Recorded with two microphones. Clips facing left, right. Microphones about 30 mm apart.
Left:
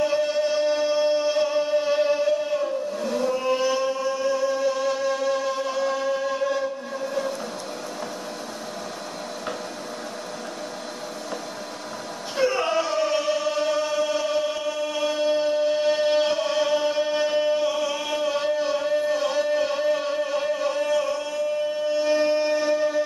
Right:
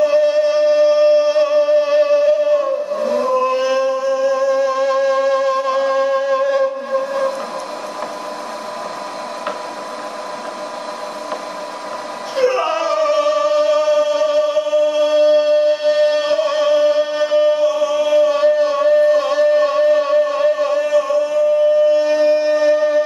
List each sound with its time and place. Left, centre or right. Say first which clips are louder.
0.0 s music: right 9 dB; right
2.6 s a sound: right 8 dB; right
4.3 s music: right 5 dB; right
12.4 s chant: right 6 dB; right
15.0 s music: right 7 dB; right
16.8 s music: right 7 dB; right
17.6 s a sound: right 8 dB; centre
18.3 s a sound: right 9 dB; right
21.9 s wind instrument: right 7 dB; centre